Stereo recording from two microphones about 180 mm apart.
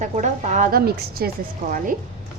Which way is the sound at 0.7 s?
60° right (ahead or behind).